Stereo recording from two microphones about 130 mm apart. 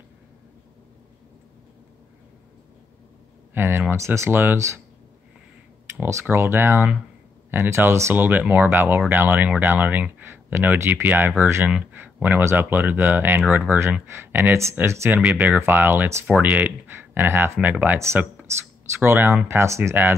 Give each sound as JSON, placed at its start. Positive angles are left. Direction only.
{"t": 3.5, "sound": "speech", "side_deg": -15}
{"t": 5.9, "sound": "speech", "side_deg": -15}